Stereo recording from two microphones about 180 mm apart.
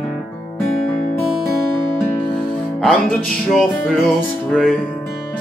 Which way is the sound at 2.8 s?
5° left (ahead or behind).